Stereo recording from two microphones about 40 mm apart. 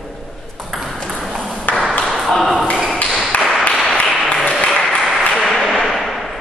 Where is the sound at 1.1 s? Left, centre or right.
Centre.